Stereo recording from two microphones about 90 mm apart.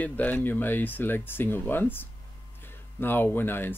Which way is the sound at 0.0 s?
20° left (ahead or behind).